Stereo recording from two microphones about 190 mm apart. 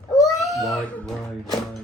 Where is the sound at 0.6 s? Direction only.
Centre (ahead or behind).